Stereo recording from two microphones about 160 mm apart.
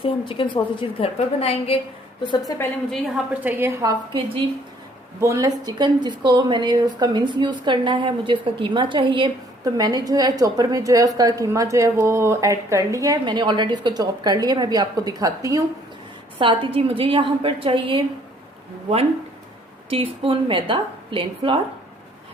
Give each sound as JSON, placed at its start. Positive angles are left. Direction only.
{"t": 0.0, "sound": "a woman's voice", "side_deg": 30}
{"t": 2.5, "sound": "a woman's voice", "side_deg": 20}
{"t": 3.4, "sound": "a woman's voice", "side_deg": -15}
{"t": 5.2, "sound": "speech", "side_deg": -20}
{"t": 16.4, "sound": "a woman's voice", "side_deg": -30}
{"t": 19.9, "sound": "a woman's voice", "side_deg": -35}